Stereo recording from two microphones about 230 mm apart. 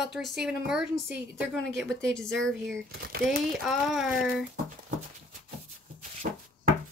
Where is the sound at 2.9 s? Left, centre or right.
Right.